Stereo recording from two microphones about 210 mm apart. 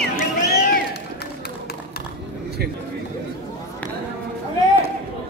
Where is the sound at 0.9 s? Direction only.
50° left (ahead or behind).